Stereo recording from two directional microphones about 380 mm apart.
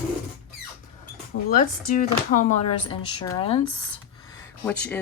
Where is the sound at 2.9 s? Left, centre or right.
Centre.